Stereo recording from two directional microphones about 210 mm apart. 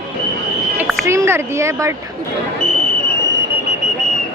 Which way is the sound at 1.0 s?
15° right (ahead or behind).